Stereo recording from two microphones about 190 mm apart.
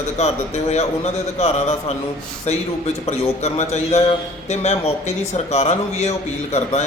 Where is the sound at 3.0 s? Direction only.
35° left (ahead or behind).